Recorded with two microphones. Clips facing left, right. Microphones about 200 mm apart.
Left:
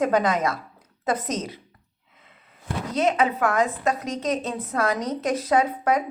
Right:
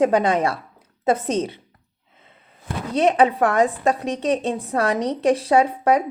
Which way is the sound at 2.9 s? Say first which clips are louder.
Right 5 dB; 35° right (ahead or behind).